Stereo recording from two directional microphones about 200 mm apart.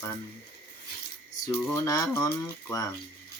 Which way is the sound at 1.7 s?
15° left (ahead or behind).